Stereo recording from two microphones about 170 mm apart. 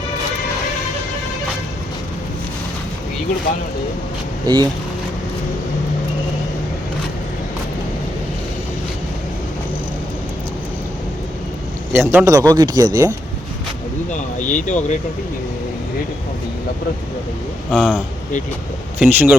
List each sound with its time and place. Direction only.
4.5 s speech: 25° right (ahead or behind)
11.9 s speech: 15° right (ahead or behind)
14.1 s speech: 45° left (ahead or behind)
17.7 s speech: 5° left (ahead or behind)
18.9 s speech: 10° right (ahead or behind)